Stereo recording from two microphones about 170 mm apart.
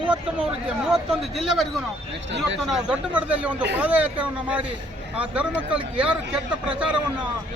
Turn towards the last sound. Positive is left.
turn(degrees=-5)  # may be behind; listen again after turning